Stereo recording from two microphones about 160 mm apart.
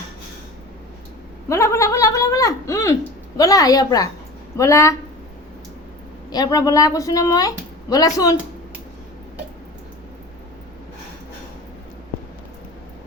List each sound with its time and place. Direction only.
1.5 s a sound: 20° left (ahead or behind)
3.3 s a woman's voice: 20° left (ahead or behind)
6.3 s a woman's voice: 25° left (ahead or behind)